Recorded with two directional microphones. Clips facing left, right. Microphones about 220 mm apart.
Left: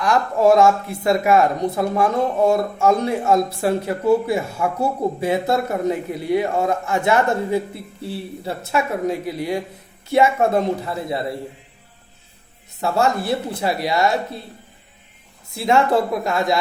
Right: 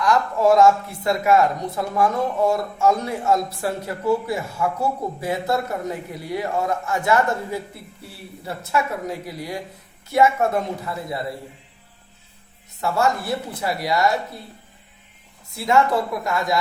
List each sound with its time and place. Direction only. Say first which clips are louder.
0.0 s speech: left 2 dB; 25° left (ahead or behind)
12.8 s speech: left 2 dB; 25° left (ahead or behind)
15.5 s speech: left 2 dB; 25° left (ahead or behind)